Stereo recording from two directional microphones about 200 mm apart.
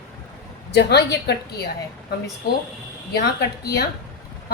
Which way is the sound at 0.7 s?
55° left (ahead or behind).